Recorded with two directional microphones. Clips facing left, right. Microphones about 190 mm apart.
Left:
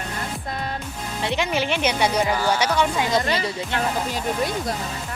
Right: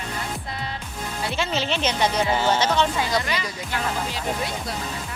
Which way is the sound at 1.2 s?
15° left (ahead or behind).